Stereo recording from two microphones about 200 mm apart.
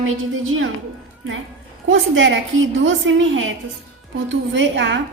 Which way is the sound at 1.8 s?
70° right (ahead or behind).